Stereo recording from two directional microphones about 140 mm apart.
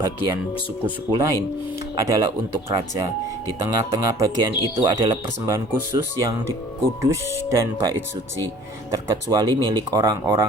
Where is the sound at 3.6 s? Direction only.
25° right (ahead or behind).